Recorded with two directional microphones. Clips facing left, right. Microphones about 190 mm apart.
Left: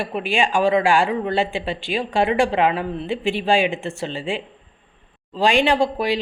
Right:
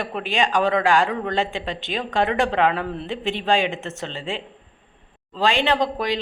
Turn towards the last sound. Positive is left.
turn(degrees=10)  # may be behind; listen again after turning